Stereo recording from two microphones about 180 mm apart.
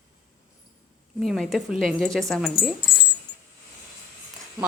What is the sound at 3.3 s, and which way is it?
Coin, 75° left (ahead or behind).